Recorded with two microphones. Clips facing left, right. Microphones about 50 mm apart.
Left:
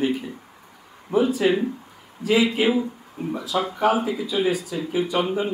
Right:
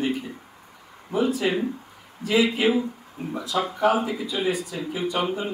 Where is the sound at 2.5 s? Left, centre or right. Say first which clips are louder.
Left 1 dB; centre.